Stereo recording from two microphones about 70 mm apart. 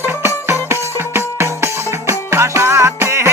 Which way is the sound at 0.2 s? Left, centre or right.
Right.